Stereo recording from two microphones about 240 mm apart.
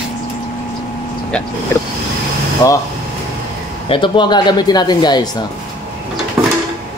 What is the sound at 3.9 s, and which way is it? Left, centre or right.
Speech, centre.